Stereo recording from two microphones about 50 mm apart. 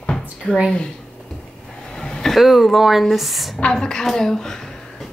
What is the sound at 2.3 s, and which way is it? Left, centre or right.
Speech, centre.